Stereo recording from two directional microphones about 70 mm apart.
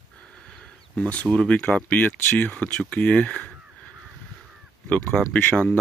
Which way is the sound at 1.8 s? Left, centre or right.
Left.